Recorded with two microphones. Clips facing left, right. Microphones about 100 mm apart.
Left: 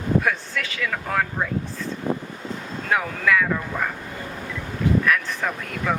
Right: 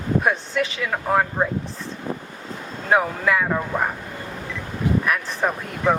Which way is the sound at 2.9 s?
25° right (ahead or behind).